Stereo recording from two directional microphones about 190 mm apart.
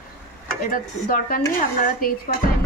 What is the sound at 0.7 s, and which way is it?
Speech, 45° left (ahead or behind).